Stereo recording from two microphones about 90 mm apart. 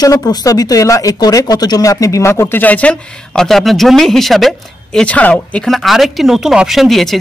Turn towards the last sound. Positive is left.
turn(degrees=0)  # may be behind; listen again after turning